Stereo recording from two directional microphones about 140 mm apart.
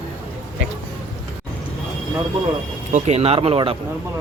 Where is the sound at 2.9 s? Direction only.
50° right (ahead or behind).